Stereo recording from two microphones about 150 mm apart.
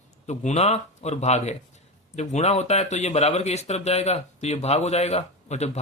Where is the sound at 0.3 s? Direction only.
45° left (ahead or behind).